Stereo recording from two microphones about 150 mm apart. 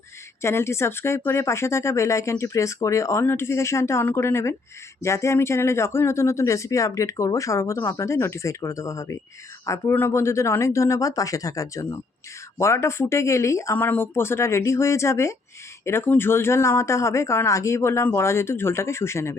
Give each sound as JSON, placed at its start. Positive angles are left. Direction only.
{"t": 0.4, "sound": "speech", "side_deg": 15}